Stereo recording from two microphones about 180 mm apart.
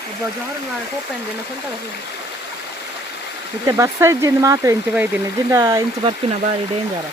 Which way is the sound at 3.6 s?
15° right (ahead or behind).